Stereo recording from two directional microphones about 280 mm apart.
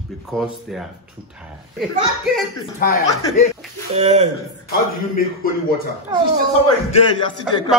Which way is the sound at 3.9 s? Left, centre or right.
Right.